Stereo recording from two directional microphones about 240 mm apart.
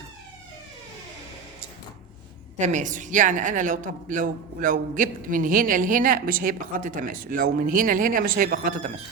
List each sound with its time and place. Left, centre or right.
2.6 s a woman's voice: right